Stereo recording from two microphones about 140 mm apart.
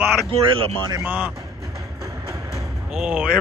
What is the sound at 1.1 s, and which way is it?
Speech, 10° right (ahead or behind).